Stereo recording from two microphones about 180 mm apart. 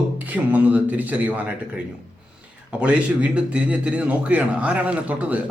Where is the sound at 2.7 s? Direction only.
5° right (ahead or behind).